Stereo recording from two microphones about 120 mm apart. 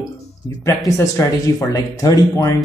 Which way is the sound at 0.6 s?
25° left (ahead or behind).